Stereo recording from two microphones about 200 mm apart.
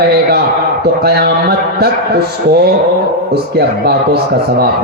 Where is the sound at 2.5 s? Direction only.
55° right (ahead or behind).